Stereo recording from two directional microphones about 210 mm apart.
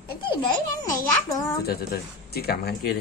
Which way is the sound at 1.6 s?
50° left (ahead or behind).